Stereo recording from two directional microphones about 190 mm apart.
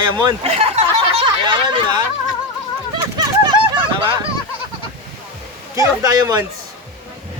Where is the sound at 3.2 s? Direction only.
25° right (ahead or behind).